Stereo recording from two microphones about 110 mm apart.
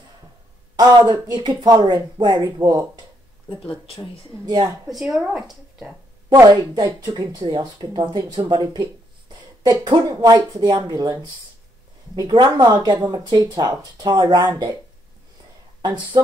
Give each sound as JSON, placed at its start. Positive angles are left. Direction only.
{"t": 0.7, "sound": "speech", "side_deg": -40}
{"t": 3.4, "sound": "speech", "side_deg": 50}
{"t": 4.8, "sound": "a woman's voice", "side_deg": 0}
{"t": 6.3, "sound": "speech", "side_deg": -35}
{"t": 12.2, "sound": "speech", "side_deg": -40}